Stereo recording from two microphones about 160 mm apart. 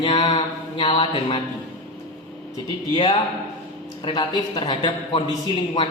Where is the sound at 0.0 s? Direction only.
30° left (ahead or behind).